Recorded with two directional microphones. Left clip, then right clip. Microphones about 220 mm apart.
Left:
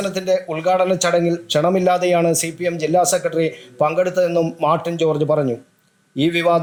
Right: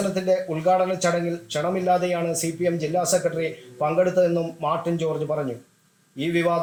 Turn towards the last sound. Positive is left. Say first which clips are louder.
# left 6 dB
turn(degrees=50)  # may be behind; listen again after turning